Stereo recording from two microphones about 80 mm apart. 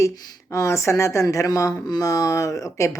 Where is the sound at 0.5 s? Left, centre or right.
Left.